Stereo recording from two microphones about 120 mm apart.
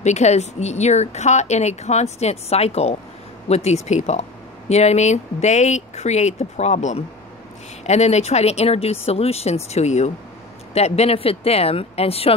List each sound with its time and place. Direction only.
0.0 s speech: 70° left (ahead or behind)